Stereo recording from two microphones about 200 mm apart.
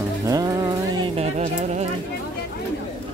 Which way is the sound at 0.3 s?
20° right (ahead or behind).